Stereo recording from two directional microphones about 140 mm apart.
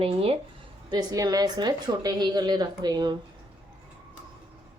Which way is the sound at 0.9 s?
30° right (ahead or behind).